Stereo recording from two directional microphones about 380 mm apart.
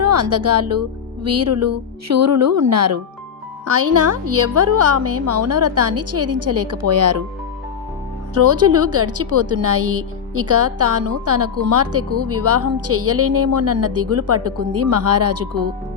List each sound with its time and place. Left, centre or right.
0.0 s a woman's voice: right
8.4 s a woman's voice: right